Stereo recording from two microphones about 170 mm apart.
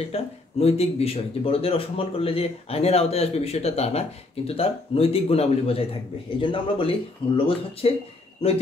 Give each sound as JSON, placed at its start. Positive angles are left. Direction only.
{"t": 0.1, "sound": "speech", "side_deg": 35}